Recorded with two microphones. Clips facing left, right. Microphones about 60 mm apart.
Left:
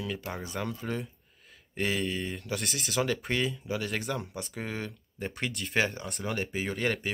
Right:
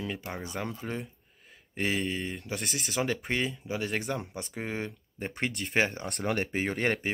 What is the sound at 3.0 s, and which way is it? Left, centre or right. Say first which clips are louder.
Speech: left 1 dB; centre.